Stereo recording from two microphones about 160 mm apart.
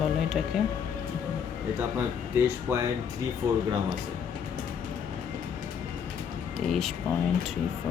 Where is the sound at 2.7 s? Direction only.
15° right (ahead or behind).